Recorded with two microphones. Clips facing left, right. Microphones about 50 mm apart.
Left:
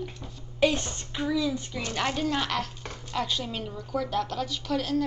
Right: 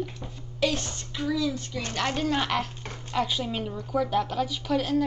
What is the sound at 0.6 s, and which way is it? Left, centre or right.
A child's voice, left.